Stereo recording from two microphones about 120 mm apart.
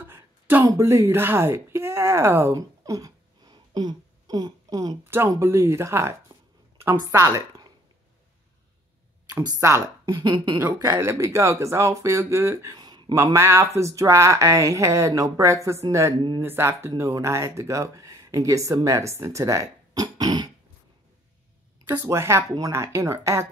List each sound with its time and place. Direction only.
0.0 s a sound: 15° right (ahead or behind)
0.7 s speech: 20° right (ahead or behind)
2.5 s a sound: 30° right (ahead or behind)
5.0 s speech: 20° right (ahead or behind)
9.3 s speech: 20° right (ahead or behind)
10.0 s speech: 40° right (ahead or behind)
11.0 s speech: 25° right (ahead or behind)
12.7 s a sound: 35° right (ahead or behind)
13.1 s speech: 25° right (ahead or behind)
21.9 s speech: 25° right (ahead or behind)